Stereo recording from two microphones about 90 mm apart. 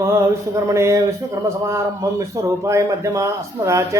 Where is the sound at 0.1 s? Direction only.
35° right (ahead or behind).